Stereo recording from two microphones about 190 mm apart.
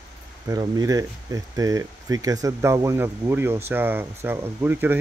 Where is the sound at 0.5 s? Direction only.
20° right (ahead or behind).